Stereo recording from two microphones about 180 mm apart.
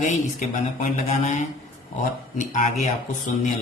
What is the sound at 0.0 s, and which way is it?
A man's voice, 45° left (ahead or behind).